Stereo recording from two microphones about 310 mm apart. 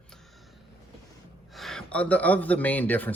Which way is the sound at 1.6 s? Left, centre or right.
Centre.